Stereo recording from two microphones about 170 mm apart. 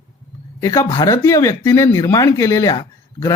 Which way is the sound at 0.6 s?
20° left (ahead or behind).